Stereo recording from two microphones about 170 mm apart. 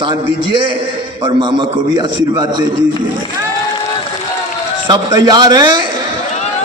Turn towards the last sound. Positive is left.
turn(degrees=-25)  # may be behind; listen again after turning